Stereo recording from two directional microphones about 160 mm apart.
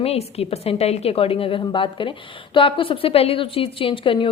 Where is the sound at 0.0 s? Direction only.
40° left (ahead or behind).